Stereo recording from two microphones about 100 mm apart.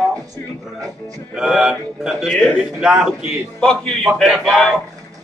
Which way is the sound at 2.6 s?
5° right (ahead or behind).